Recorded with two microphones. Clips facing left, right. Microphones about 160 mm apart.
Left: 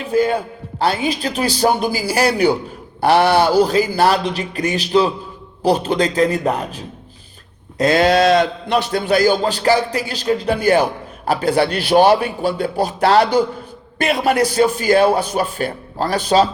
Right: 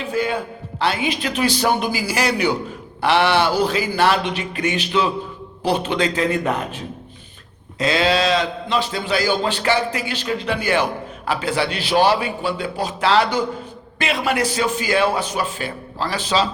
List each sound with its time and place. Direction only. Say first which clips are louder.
0.0 s a man's voice: left 5 dB; 40° left (ahead or behind)
7.8 s a man's voice: left 5 dB; 50° left (ahead or behind)